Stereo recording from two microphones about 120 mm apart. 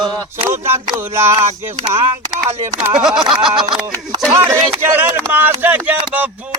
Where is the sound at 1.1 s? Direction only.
25° right (ahead or behind).